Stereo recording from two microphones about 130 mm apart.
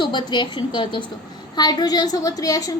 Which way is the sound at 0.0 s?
35° left (ahead or behind).